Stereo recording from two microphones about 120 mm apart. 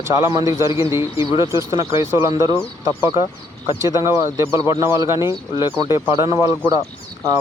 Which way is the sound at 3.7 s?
25° right (ahead or behind).